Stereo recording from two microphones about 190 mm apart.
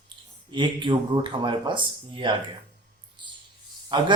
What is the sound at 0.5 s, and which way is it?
Speech, 25° right (ahead or behind).